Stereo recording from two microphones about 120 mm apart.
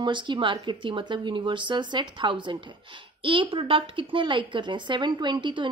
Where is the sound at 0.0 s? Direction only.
40° right (ahead or behind).